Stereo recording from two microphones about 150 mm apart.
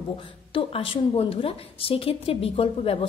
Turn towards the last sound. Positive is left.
turn(degrees=40)  # may be behind; listen again after turning